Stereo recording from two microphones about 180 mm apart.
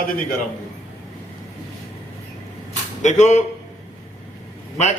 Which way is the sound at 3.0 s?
40° left (ahead or behind).